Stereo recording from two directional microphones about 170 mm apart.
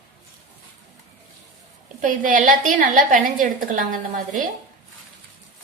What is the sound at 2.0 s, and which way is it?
A woman's voice, 50° right (ahead or behind).